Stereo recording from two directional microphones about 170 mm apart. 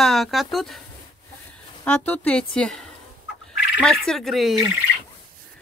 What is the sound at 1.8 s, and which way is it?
Speech, 10° left (ahead or behind).